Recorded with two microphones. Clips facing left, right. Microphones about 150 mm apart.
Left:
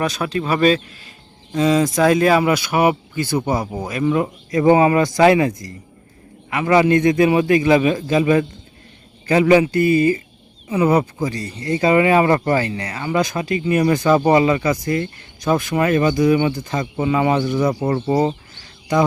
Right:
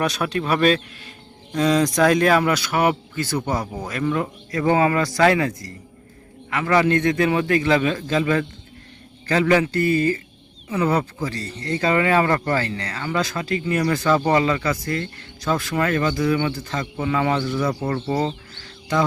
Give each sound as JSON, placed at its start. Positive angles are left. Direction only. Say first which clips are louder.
{"t": 0.0, "sound": "a man's voice", "louder": "left 1 dB", "side_deg": 0}